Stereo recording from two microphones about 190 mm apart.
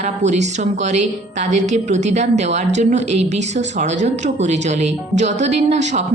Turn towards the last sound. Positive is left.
turn(degrees=-40)  # may be behind; listen again after turning